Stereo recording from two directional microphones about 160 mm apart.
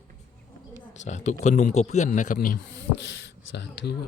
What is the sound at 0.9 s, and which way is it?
A man's voice, 45° left (ahead or behind).